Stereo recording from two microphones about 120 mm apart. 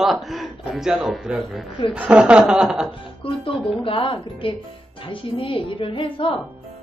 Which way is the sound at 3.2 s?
50° left (ahead or behind).